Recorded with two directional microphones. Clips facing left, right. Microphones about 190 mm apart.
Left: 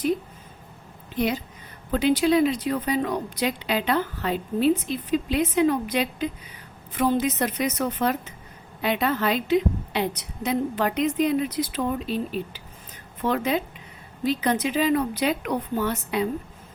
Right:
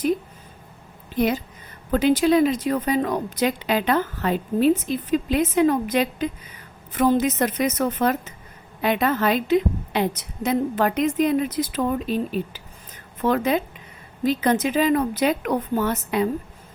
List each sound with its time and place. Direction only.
1.9 s a woman's voice: 45° right (ahead or behind)